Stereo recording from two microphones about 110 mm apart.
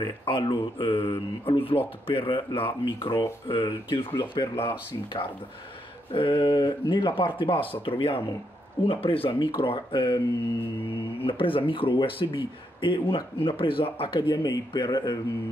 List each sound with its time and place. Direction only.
0.2 s speech: 50° left (ahead or behind)
11.2 s speech: 55° left (ahead or behind)
14.3 s speech: 40° left (ahead or behind)